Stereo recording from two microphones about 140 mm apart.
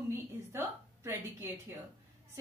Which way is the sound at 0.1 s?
15° right (ahead or behind).